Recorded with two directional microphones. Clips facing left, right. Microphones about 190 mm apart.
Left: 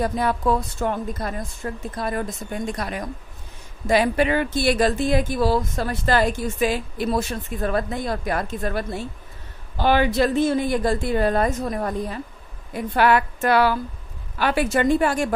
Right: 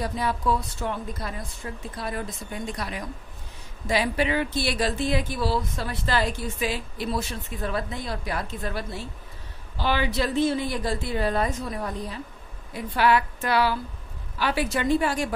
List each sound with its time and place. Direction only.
0.0 s speech: 50° left (ahead or behind)